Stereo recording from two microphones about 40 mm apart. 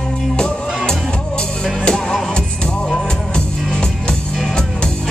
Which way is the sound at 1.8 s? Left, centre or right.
Centre.